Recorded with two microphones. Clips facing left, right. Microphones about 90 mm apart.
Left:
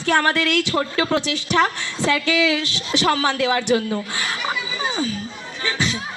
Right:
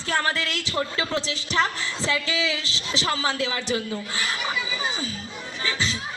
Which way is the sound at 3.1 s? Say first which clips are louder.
Left 7 dB; 35° left (ahead or behind).